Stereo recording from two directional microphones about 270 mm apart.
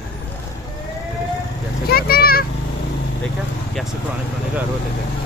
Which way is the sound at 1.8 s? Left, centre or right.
Left.